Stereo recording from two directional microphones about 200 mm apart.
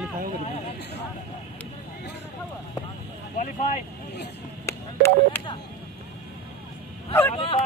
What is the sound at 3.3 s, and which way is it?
Vehicle, 35° left (ahead or behind).